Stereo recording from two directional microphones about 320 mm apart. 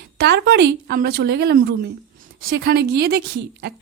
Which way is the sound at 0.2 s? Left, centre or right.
Right.